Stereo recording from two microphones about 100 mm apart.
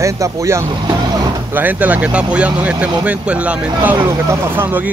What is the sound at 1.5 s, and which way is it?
Speech, 15° right (ahead or behind).